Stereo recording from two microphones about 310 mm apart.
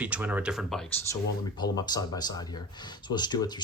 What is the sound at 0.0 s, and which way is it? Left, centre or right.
Speech, centre.